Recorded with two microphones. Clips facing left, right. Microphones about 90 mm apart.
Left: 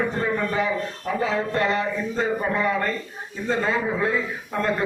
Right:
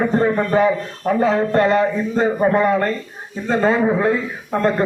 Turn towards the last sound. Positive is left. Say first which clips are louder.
# right 6 dB
turn(degrees=-35)  # may be behind; listen again after turning